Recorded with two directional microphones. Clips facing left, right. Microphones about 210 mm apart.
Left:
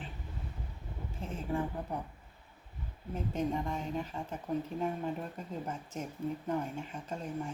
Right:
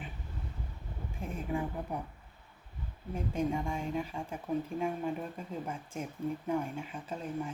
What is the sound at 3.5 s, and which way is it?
Speech, 10° right (ahead or behind).